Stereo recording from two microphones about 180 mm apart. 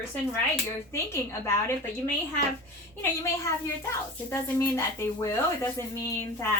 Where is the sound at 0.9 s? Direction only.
15° left (ahead or behind).